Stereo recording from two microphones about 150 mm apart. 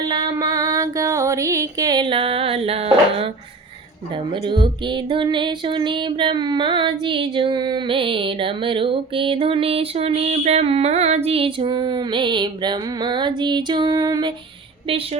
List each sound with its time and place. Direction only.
0.1 s female singing: 25° right (ahead or behind); by 3.2 s 40° right (ahead or behind)
4.3 s music: 30° right (ahead or behind)
14.8 s music: 40° right (ahead or behind)